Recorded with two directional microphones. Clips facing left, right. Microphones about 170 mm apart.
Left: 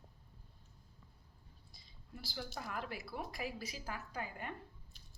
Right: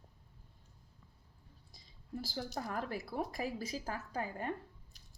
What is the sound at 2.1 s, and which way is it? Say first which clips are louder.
Speech: right 6 dB; 40° right (ahead or behind).